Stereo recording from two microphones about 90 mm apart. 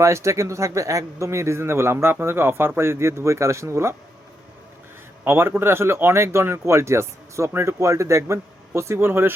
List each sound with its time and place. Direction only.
0.0 s speech: 35° right (ahead or behind)
5.2 s speech: 25° right (ahead or behind)